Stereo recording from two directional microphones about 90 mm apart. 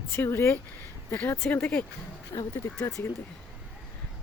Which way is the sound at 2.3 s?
40° left (ahead or behind).